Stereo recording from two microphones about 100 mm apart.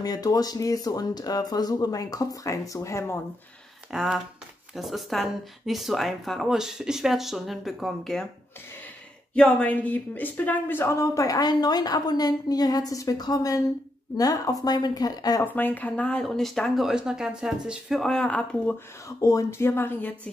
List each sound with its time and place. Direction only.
0.0 s speech: 40° left (ahead or behind)
3.9 s speech: 5° right (ahead or behind)
9.3 s speech: 15° left (ahead or behind); by 15.4 s 40° left (ahead or behind)
15.4 s speech: 15° left (ahead or behind)
19.0 s speech: 30° left (ahead or behind)